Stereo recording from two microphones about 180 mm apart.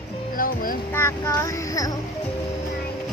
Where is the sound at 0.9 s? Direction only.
15° left (ahead or behind).